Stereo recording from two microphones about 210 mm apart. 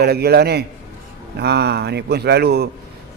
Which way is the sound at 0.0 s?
50° right (ahead or behind).